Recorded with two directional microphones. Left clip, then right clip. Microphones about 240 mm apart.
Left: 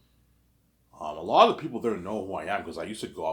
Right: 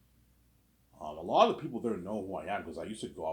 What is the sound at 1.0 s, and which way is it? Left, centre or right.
Speech, centre.